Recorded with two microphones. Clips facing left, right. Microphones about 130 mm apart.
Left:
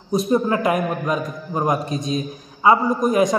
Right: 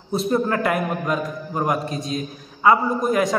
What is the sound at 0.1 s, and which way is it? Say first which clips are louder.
A man's voice: left 2 dB; 15° left (ahead or behind).